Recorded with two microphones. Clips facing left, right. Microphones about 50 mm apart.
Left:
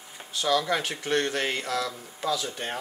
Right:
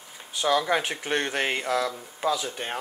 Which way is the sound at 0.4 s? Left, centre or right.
Right.